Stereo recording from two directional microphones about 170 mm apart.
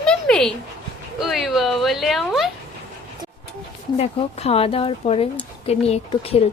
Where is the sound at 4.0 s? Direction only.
35° left (ahead or behind).